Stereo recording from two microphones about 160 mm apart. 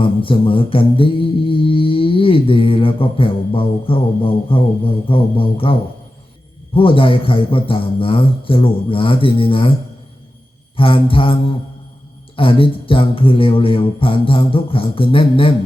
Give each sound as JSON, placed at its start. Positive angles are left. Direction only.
{"t": 0.0, "sound": "mantra", "side_deg": 35}
{"t": 6.7, "sound": "mantra", "side_deg": 35}
{"t": 10.8, "sound": "mantra", "side_deg": 35}
{"t": 12.4, "sound": "mantra", "side_deg": 35}